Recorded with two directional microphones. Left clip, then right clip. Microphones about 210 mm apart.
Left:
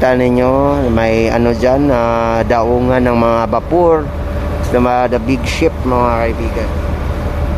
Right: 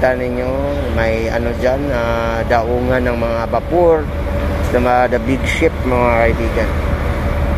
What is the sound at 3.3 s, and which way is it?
Speech, 30° left (ahead or behind).